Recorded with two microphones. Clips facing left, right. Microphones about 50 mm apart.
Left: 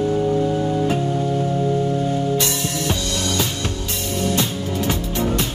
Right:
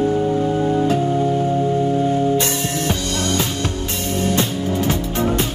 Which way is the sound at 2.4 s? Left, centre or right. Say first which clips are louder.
Right 2 dB; right.